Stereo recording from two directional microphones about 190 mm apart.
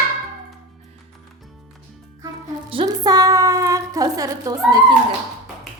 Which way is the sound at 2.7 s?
25° right (ahead or behind).